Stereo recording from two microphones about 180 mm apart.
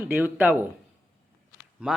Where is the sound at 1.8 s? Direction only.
5° right (ahead or behind).